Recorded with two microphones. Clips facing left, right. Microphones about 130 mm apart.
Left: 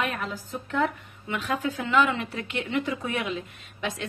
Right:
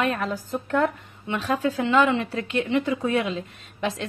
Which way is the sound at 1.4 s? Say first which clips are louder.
Right 5 dB; 35° right (ahead or behind).